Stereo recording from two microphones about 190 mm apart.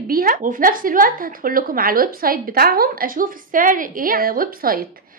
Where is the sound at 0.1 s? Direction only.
50° right (ahead or behind).